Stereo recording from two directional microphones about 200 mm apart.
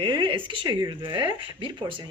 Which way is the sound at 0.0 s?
25° right (ahead or behind).